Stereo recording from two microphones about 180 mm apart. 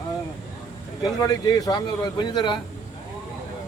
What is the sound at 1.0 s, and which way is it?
A man's voice, 20° left (ahead or behind).